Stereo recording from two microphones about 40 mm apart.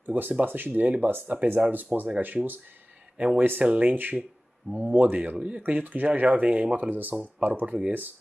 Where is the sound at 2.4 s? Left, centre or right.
Right.